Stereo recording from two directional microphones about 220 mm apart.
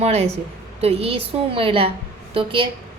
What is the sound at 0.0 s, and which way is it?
A woman's voice, 30° right (ahead or behind).